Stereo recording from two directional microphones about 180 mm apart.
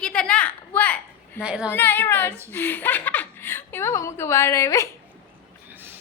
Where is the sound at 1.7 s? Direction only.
10° left (ahead or behind).